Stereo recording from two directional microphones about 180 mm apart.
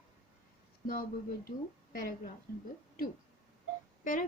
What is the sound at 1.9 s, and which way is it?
Speech, 50° left (ahead or behind).